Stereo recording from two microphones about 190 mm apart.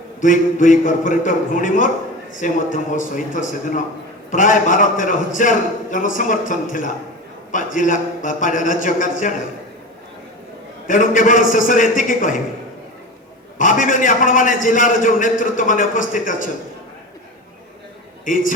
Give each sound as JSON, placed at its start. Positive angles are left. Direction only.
{"t": 0.2, "sound": "a man's voice", "side_deg": 45}
{"t": 10.8, "sound": "a man's voice", "side_deg": 45}
{"t": 13.6, "sound": "a man's voice", "side_deg": 45}
{"t": 18.3, "sound": "a man's voice", "side_deg": 45}